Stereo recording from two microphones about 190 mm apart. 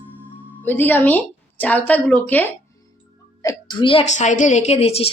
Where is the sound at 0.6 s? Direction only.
10° left (ahead or behind).